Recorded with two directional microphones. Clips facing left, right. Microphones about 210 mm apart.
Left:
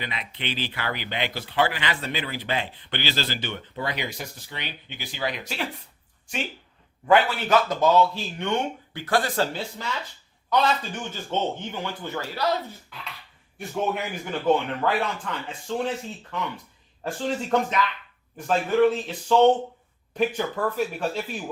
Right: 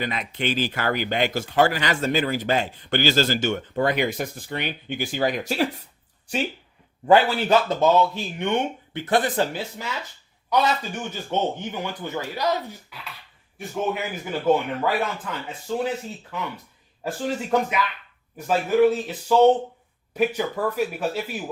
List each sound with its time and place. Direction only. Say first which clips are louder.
0.0 s speech: right 7 dB; 45° right (ahead or behind)
7.1 s a man's voice: right 3 dB; 30° right (ahead or behind); by 13.0 s 15° right (ahead or behind)
13.6 s a man's voice: right 1 dB; centre (ahead or behind)